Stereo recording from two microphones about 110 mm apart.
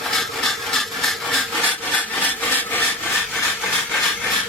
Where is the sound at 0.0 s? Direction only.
Centre (ahead or behind).